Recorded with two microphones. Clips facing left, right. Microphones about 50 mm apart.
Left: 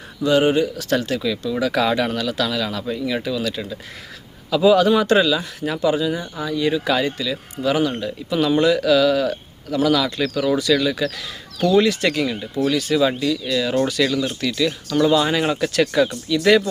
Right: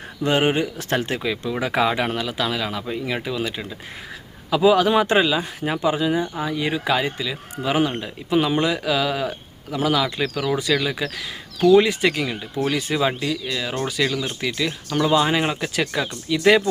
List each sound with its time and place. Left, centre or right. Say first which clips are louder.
0.2 s speech: left 3 dB; right; by 12.6 s centre
12.6 s speech: left 3 dB; centre